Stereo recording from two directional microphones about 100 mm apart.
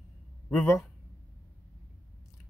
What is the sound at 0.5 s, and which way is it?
Speech, 5° left (ahead or behind).